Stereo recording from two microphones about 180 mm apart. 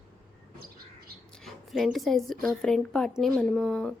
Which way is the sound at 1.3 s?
Centre (ahead or behind).